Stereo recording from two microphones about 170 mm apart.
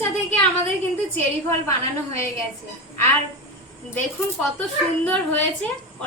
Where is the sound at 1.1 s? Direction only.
15° left (ahead or behind).